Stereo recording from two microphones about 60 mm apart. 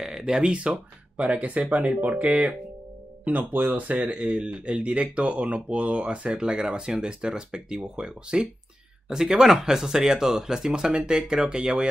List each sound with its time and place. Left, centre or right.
0.0 s speech: centre